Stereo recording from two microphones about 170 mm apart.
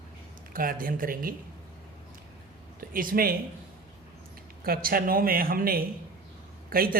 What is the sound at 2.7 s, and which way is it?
Speech, 55° right (ahead or behind).